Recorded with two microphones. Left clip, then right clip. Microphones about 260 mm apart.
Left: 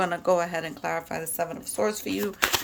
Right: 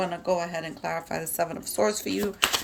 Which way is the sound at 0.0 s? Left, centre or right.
Centre.